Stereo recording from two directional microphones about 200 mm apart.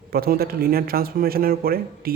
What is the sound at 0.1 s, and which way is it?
Speech, 50° right (ahead or behind).